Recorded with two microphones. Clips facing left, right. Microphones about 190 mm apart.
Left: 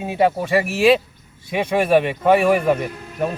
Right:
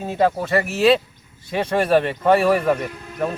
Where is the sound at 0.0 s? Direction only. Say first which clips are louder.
Left 1 dB; 5° left (ahead or behind).